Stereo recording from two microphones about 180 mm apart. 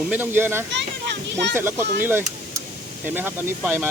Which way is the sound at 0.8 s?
70° right (ahead or behind).